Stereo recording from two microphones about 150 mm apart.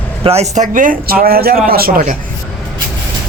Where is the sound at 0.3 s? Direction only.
50° right (ahead or behind); by 1.9 s 85° right.